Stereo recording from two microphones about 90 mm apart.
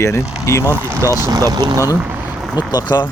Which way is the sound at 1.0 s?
40° left (ahead or behind).